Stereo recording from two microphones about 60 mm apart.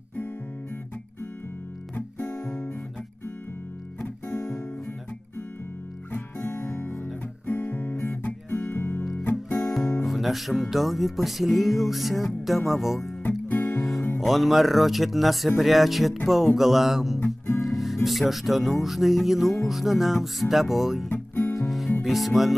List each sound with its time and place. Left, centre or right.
6.1 s music: left
7.4 s guitar: left
8.6 s music: left
9.7 s guitar: centre
10.0 s music: centre
13.5 s music: left
13.7 s music: centre
17.6 s speech: centre
19.6 s music: centre
21.1 s music: left
21.5 s music: centre